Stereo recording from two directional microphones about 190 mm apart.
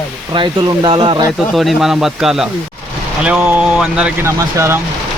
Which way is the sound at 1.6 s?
Centre (ahead or behind).